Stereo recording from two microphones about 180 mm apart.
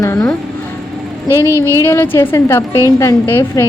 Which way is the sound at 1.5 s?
15° right (ahead or behind).